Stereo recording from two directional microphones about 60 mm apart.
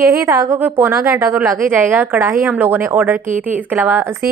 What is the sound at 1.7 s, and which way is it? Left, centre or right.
A woman's voice, right.